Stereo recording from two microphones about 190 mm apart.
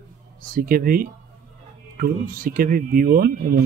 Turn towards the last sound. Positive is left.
turn(degrees=-50)  # may be behind; listen again after turning